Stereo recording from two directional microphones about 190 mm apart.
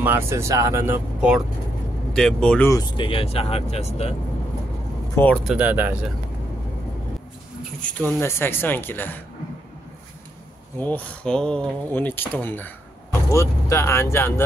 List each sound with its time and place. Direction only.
0.0 s speech: 10° right (ahead or behind)
2.1 s speech: 5° left (ahead or behind)
2.7 s speech: 25° left (ahead or behind)
5.1 s speech: 5° left (ahead or behind)
7.8 s speech: 10° left (ahead or behind)
10.8 s speech: 10° left (ahead or behind)